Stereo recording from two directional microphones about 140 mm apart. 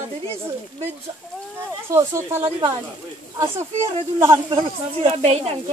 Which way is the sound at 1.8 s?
20° right (ahead or behind).